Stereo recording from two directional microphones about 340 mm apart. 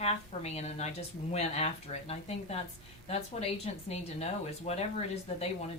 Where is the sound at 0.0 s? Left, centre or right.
Centre.